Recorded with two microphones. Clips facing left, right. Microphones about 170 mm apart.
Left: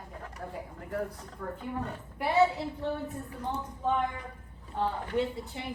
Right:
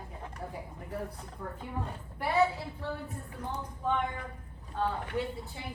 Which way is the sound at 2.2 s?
20° left (ahead or behind).